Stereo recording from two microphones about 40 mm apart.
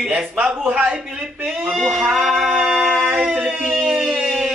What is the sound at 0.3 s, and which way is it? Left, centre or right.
Speech, right.